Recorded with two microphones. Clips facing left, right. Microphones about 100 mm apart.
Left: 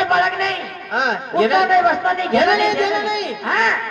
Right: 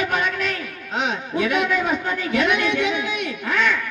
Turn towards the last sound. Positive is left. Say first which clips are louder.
# left 3 dB
turn(degrees=60)  # may be behind; listen again after turning